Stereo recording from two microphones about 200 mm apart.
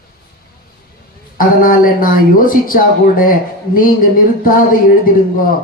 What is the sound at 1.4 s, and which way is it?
Speech, 45° left (ahead or behind).